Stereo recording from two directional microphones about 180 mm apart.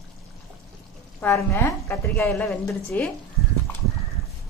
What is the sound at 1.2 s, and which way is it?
A woman's voice, 15° left (ahead or behind).